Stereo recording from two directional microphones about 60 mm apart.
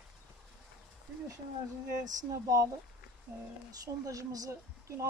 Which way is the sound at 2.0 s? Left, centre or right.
Right.